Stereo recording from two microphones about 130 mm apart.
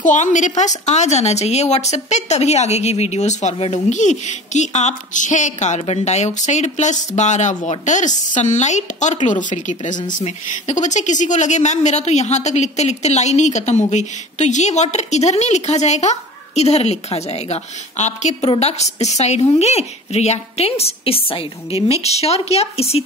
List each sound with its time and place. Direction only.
0.0 s a woman's voice: 75° left (ahead or behind)
10.1 s a woman's voice: 65° left (ahead or behind)